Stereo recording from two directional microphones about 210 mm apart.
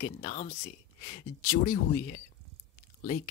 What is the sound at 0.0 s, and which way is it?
Speech, 40° left (ahead or behind).